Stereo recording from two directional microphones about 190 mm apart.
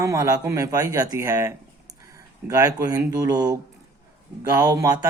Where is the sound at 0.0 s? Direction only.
15° right (ahead or behind).